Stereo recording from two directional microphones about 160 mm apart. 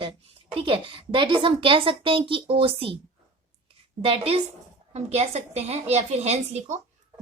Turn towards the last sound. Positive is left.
turn(degrees=-45)  # may be behind; listen again after turning